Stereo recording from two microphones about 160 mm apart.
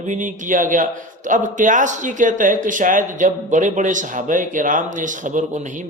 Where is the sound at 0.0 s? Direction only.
50° right (ahead or behind).